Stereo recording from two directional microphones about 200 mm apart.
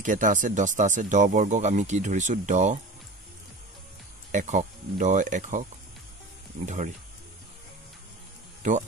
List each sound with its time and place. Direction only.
0.0 s speech: 40° right (ahead or behind)
4.3 s speech: 40° right (ahead or behind)